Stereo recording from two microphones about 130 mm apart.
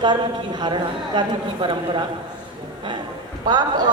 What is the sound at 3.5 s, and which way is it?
Speech, 35° right (ahead or behind).